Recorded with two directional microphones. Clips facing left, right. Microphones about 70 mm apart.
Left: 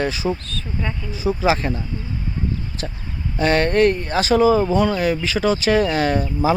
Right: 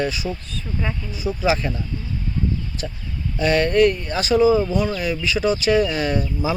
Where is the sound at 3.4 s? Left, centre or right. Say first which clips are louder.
Even; left.